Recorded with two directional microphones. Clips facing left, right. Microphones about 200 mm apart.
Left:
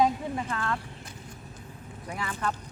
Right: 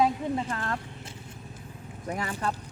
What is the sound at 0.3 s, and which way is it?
Speech, 30° right (ahead or behind).